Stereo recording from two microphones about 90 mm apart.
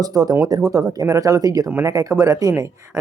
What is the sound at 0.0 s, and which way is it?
Speech, 45° right (ahead or behind).